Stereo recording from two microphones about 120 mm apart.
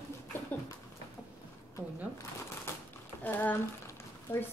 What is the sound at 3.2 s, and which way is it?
Speech, 15° left (ahead or behind).